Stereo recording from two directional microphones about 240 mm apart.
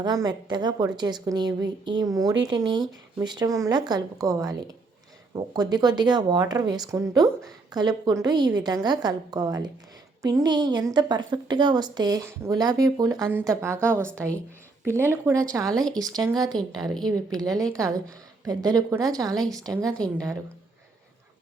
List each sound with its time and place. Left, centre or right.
0.0 s a woman's voice: centre